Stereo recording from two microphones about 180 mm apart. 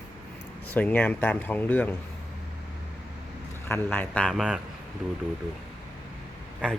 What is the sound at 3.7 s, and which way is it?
Speech, 10° left (ahead or behind).